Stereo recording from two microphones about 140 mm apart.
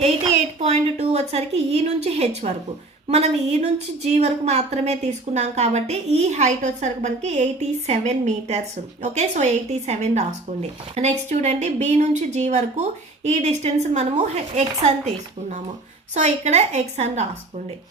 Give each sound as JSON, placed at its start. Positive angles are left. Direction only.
{"t": 0.6, "sound": "a woman's voice", "side_deg": -50}